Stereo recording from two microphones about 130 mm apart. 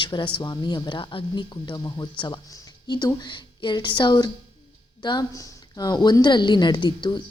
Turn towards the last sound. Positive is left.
turn(degrees=35)  # may be behind; listen again after turning